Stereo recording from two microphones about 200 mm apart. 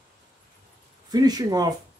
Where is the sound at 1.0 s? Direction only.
20° right (ahead or behind).